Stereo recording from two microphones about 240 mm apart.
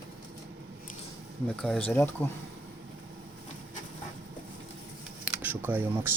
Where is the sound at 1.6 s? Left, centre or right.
Centre.